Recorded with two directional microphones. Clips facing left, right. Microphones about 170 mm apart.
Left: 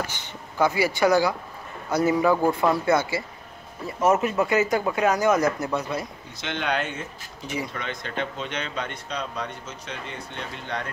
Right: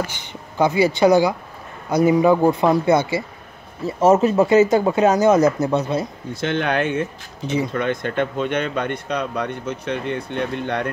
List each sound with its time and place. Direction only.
0.3 s speech: 20° right (ahead or behind)
6.4 s speech: 50° right (ahead or behind)
7.4 s speech: 25° right (ahead or behind)
7.7 s speech: 55° right (ahead or behind)